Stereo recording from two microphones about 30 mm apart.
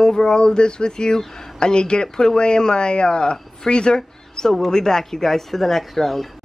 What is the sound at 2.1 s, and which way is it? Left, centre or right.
Speech, centre.